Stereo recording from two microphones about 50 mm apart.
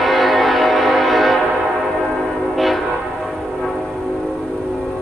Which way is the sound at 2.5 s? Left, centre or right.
Centre.